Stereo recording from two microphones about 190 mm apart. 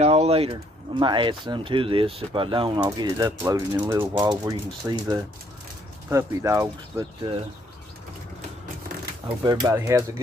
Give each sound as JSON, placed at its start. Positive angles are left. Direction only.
{"t": 0.0, "sound": "speech", "side_deg": -35}
{"t": 9.4, "sound": "speech", "side_deg": -20}